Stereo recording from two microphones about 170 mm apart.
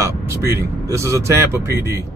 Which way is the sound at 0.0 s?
15° right (ahead or behind).